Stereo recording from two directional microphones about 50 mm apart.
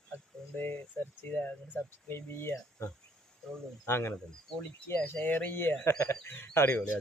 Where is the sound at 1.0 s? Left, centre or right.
Left.